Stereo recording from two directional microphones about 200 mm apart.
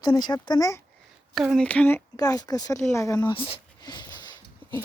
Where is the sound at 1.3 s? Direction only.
Centre (ahead or behind); by 4.2 s 20° left (ahead or behind).